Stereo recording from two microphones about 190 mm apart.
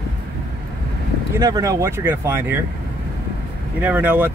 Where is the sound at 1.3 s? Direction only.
20° right (ahead or behind).